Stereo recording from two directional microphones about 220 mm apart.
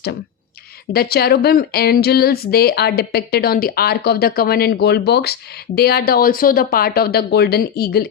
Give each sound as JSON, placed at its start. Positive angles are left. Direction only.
{"t": 0.9, "sound": "speech", "side_deg": 45}